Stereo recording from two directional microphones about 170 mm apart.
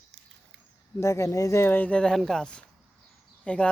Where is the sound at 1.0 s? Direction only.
15° left (ahead or behind).